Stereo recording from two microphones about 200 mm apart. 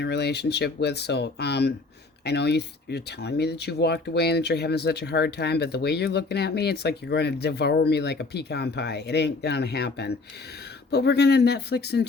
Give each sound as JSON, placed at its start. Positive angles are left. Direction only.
{"t": 0.0, "sound": "speech", "side_deg": 55}